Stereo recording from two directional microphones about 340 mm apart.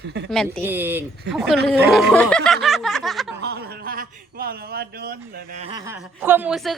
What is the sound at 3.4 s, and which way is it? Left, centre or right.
A man's voice, right.